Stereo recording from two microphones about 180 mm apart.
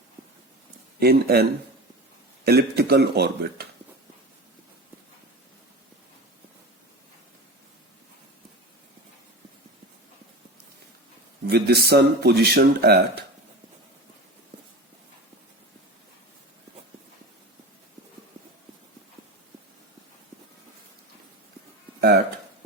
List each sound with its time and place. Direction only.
0.9 s speech: 60° right (ahead or behind)
11.4 s speech: 60° right (ahead or behind)